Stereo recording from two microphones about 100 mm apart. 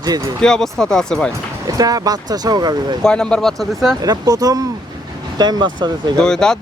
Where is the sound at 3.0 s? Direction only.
10° left (ahead or behind).